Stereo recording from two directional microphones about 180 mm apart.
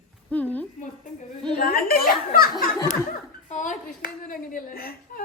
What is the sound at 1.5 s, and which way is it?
Speech, 55° left (ahead or behind).